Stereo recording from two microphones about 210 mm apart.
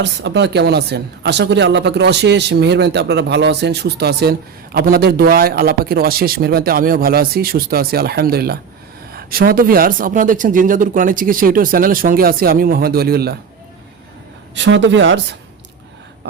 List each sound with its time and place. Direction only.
0.0 s speech: 55° right (ahead or behind)
14.5 s speech: 60° right (ahead or behind)
16.2 s a sound: 55° right (ahead or behind)